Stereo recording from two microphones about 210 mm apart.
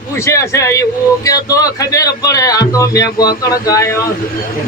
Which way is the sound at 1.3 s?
15° left (ahead or behind).